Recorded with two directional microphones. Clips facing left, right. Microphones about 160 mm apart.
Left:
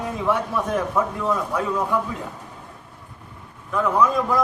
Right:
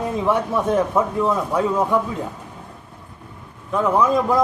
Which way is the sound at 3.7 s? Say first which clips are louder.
Right 2 dB; 25° right (ahead or behind).